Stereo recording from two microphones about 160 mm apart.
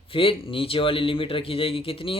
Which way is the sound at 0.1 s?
35° left (ahead or behind).